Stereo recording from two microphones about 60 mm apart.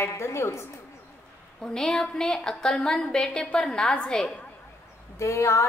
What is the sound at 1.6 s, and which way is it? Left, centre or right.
A woman's voice, centre.